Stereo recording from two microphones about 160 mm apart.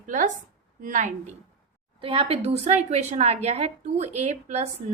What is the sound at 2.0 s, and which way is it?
A woman's voice, 35° right (ahead or behind).